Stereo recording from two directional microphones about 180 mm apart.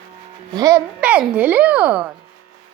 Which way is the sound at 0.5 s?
20° right (ahead or behind).